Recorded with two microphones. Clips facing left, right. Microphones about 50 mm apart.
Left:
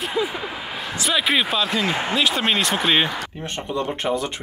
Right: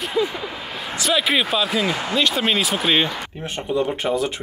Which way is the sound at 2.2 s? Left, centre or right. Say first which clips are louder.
Right 2 dB; centre.